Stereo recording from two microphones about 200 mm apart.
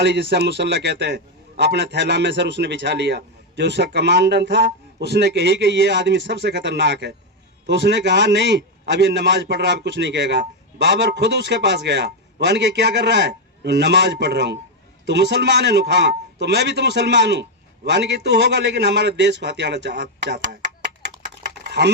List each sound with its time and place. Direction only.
0.0 s a man's voice: 60° right (ahead or behind)
21.7 s speech: 60° right (ahead or behind)